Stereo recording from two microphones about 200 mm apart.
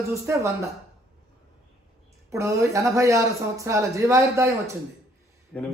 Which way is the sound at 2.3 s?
15° right (ahead or behind).